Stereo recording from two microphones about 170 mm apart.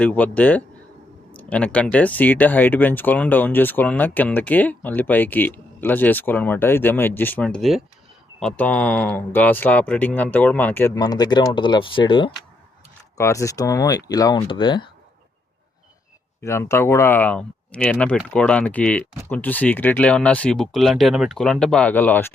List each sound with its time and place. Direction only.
0.0 s speech: 10° left (ahead or behind)
10.9 s speech: 20° left (ahead or behind)
13.1 s speech: 20° left (ahead or behind)
16.4 s speech: 15° left (ahead or behind)